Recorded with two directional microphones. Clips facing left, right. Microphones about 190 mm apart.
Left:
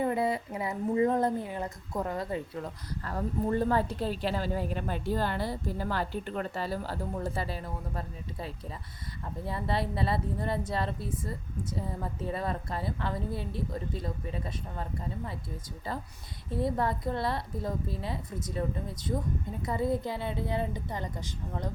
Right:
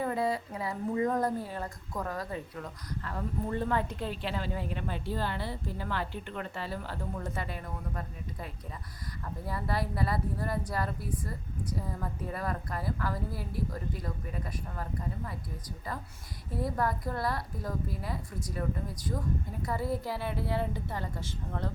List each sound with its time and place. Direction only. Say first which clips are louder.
0.0 s a woman's voice: left 2 dB; 20° left (ahead or behind)
3.0 s a woman's voice: left 4 dB; 40° left (ahead or behind)
9.5 s a woman's voice: left 2 dB; 25° left (ahead or behind)
16.6 s a woman's voice: left 2 dB; 25° left (ahead or behind)
19.6 s a woman's voice: left 3 dB; 20° left (ahead or behind)